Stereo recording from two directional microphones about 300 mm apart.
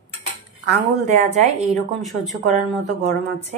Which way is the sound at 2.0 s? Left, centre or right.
Centre.